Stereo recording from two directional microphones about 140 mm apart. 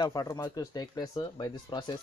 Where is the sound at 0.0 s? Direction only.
25° left (ahead or behind).